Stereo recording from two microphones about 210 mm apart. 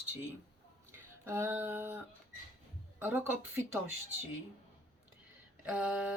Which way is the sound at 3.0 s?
5° right (ahead or behind).